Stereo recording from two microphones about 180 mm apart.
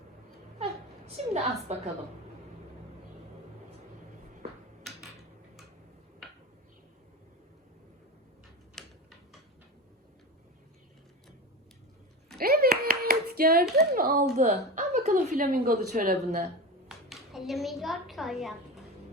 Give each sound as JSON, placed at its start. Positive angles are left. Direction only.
{"t": 0.6, "sound": "a sound", "side_deg": -35}
{"t": 8.8, "sound": "a sound", "side_deg": 0}
{"t": 12.4, "sound": "hands", "side_deg": -55}
{"t": 13.7, "sound": "a child's voice", "side_deg": -60}
{"t": 14.3, "sound": "a woman's voice", "side_deg": -40}
{"t": 17.1, "sound": "speech", "side_deg": 0}